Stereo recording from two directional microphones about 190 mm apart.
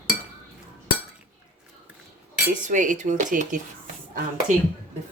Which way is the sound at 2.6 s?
40° right (ahead or behind).